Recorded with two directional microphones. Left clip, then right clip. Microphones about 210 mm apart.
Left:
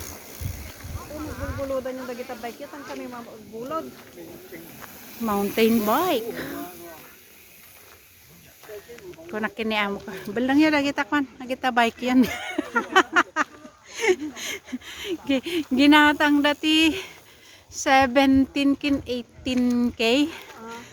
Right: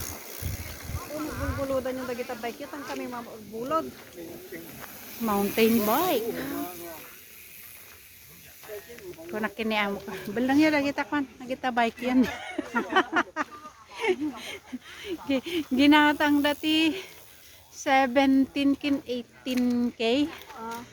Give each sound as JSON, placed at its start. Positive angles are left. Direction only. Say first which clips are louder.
{"t": 0.9, "sound": "snake", "louder": "right 1 dB", "side_deg": -30}
{"t": 1.7, "sound": "speech", "louder": "even", "side_deg": -55}
{"t": 5.6, "sound": "speech", "louder": "left 3 dB", "side_deg": 15}
{"t": 9.3, "sound": "speech", "louder": "left 3 dB", "side_deg": 15}